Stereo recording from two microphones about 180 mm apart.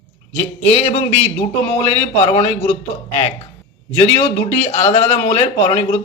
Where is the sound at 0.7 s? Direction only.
35° left (ahead or behind).